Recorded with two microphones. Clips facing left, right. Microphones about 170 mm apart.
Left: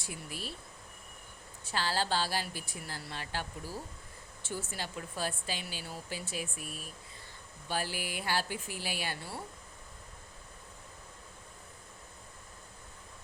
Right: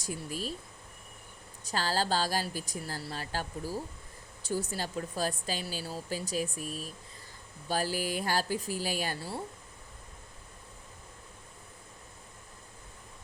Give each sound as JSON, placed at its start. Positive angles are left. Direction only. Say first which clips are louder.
{"t": 0.0, "sound": "a woman's voice", "louder": "right 6 dB", "side_deg": -40}
{"t": 1.6, "sound": "a woman's voice", "louder": "right 2 dB", "side_deg": -40}